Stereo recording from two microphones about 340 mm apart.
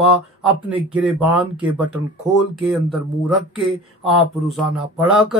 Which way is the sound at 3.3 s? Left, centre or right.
Centre.